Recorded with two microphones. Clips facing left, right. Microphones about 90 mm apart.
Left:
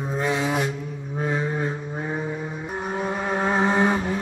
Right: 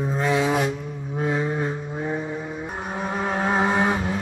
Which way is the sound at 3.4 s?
10° right (ahead or behind).